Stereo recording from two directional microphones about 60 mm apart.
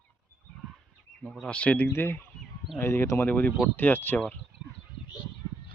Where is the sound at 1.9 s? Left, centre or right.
Left.